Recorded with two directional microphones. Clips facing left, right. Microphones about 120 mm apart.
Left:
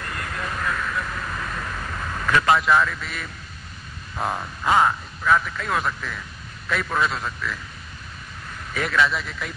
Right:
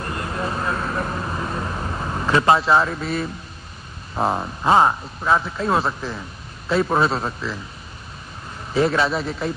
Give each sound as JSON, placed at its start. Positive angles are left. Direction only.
{"t": 0.0, "sound": "vehicle", "side_deg": -25}
{"t": 4.1, "sound": "a man's voice", "side_deg": -30}
{"t": 8.7, "sound": "a man's voice", "side_deg": -30}